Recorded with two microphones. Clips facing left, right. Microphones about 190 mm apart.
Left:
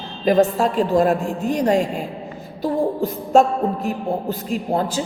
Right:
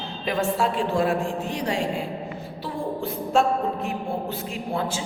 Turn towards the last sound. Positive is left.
turn(degrees=40)  # may be behind; listen again after turning